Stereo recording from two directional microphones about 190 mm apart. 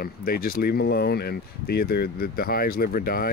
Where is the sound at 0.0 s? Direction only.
50° left (ahead or behind).